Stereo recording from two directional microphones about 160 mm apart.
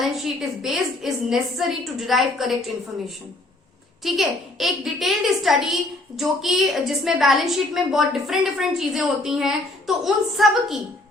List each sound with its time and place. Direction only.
0.0 s a woman's voice: centre (ahead or behind)
4.0 s a woman's voice: centre (ahead or behind)